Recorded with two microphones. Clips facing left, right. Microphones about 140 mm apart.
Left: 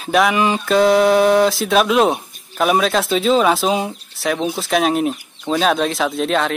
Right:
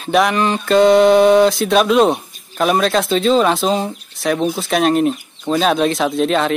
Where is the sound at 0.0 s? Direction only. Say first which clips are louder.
Right 1 dB; centre (ahead or behind).